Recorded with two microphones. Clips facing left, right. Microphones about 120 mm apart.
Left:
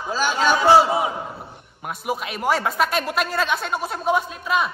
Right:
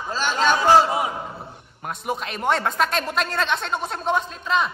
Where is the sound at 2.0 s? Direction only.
5° left (ahead or behind).